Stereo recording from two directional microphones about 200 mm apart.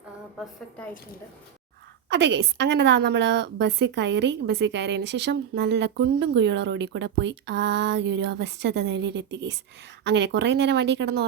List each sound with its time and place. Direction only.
2.0 s a woman's voice: 60° right (ahead or behind)